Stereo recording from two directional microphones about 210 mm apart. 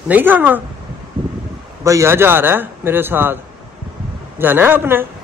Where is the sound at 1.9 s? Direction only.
10° right (ahead or behind).